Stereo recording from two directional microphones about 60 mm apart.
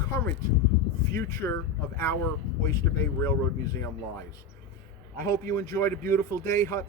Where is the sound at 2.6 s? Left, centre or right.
Left.